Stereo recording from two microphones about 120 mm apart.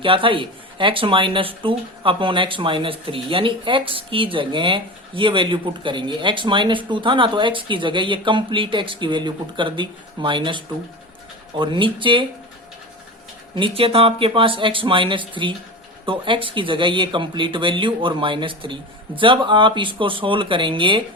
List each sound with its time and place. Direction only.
0.0 s speech: 45° right (ahead or behind)
13.6 s speech: 50° right (ahead or behind)